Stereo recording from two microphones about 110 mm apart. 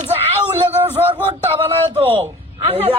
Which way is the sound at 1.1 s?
55° right (ahead or behind).